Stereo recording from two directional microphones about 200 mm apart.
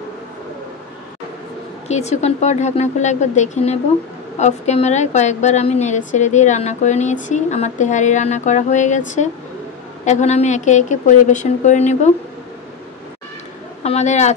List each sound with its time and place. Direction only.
1.9 s a woman's voice: 35° left (ahead or behind)
13.8 s a woman's voice: 35° left (ahead or behind)